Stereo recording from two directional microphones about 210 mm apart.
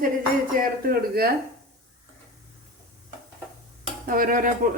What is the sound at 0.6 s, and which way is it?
Speech, 45° right (ahead or behind).